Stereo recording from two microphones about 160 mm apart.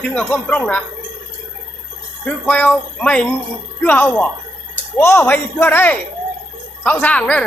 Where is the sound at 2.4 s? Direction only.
5° left (ahead or behind).